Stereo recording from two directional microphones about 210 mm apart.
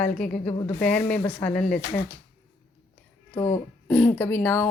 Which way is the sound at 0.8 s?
5° left (ahead or behind).